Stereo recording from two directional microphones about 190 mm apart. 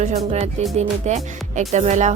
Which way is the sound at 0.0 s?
35° right (ahead or behind).